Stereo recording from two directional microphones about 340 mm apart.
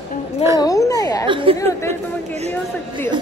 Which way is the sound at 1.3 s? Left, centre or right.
Centre.